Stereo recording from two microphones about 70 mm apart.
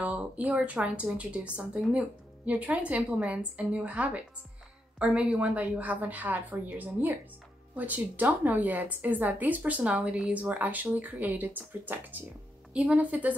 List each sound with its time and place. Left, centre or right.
0.0 s a woman's voice: right